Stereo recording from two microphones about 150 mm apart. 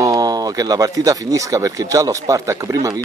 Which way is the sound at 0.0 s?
25° right (ahead or behind).